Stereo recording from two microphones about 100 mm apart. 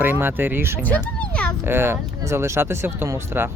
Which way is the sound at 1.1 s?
10° left (ahead or behind).